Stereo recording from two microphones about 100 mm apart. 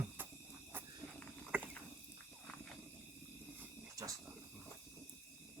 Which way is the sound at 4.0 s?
35° right (ahead or behind).